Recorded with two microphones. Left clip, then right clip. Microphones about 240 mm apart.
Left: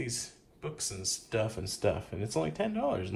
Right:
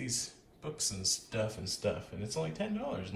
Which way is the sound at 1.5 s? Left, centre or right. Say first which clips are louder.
Left 4 dB; centre.